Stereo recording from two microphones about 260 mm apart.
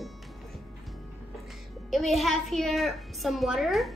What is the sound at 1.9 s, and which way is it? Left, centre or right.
A woman's voice, centre.